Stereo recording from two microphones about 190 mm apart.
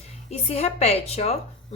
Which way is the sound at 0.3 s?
35° left (ahead or behind).